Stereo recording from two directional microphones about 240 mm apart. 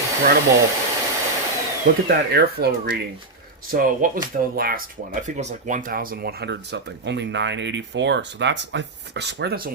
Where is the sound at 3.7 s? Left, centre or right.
Right.